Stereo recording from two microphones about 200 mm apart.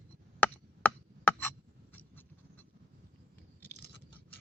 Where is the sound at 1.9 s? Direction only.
10° left (ahead or behind).